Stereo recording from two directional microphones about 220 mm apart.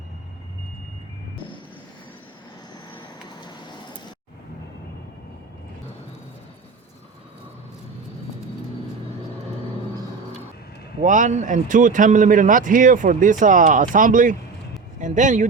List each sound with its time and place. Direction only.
3.4 s vehicle: 20° left (ahead or behind)
11.0 s speech: 35° right (ahead or behind)